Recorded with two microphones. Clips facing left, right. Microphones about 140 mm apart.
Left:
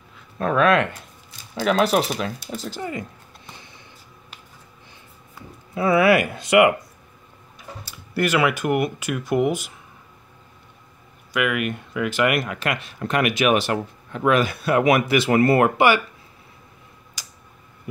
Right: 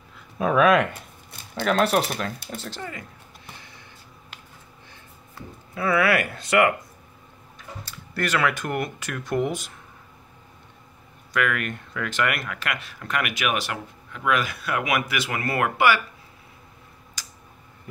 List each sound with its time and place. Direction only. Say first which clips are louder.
0.4 s speech: even; 5° right (ahead or behind)
1.5 s speech: left 2 dB; 5° left (ahead or behind)
2.8 s speech: left 6 dB; 20° left (ahead or behind)
5.8 s speech: left 5 dB; 20° left (ahead or behind)
11.3 s speech: left 3 dB; 10° left (ahead or behind)
17.2 s a sound: right 1 dB; 15° left (ahead or behind)